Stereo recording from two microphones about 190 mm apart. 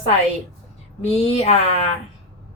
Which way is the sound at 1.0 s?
35° left (ahead or behind).